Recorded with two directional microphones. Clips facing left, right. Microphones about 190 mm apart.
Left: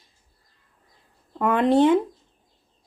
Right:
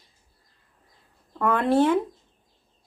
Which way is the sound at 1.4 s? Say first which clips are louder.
Left 3 dB; 15° left (ahead or behind).